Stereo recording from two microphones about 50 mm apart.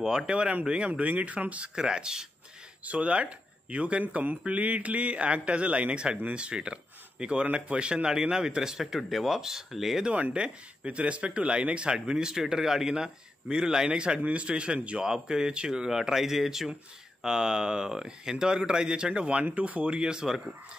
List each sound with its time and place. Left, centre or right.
0.0 s a man's voice: centre
1.8 s speech: centre
2.8 s a man's voice: right; by 10.0 s centre
10.3 s speech: right